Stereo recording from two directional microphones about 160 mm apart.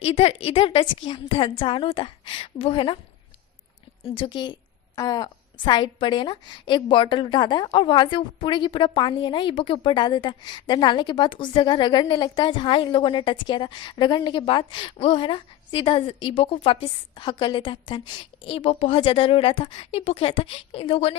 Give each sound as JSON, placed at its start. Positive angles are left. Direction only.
{"t": 0.0, "sound": "a woman's voice", "side_deg": 40}
{"t": 4.0, "sound": "a woman's voice", "side_deg": 35}